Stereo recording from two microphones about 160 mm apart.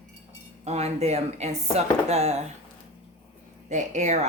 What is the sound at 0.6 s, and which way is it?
Speech, 40° right (ahead or behind).